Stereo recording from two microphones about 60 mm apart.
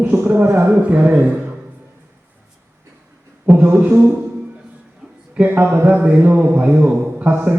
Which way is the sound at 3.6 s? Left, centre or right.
Right.